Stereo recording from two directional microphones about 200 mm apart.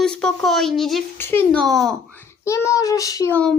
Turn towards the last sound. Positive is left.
turn(degrees=5)  # may be behind; listen again after turning